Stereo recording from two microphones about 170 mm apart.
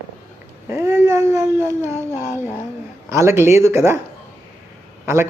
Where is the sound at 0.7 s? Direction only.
15° right (ahead or behind).